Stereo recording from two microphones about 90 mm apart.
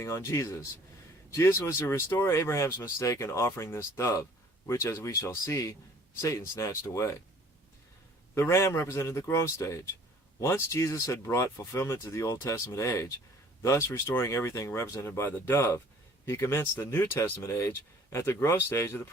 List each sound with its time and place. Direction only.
0.0 s speech: 30° left (ahead or behind)
8.4 s speech: 30° left (ahead or behind)